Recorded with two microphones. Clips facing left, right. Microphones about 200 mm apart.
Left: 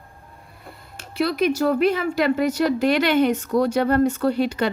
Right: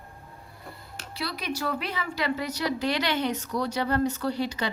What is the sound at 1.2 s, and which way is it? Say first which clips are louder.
Speech: left 12 dB; 50° left (ahead or behind).